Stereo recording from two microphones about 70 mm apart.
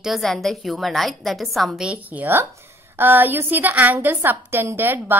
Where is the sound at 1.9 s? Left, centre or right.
Right.